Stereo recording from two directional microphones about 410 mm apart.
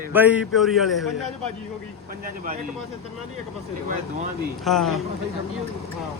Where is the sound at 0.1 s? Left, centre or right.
Centre.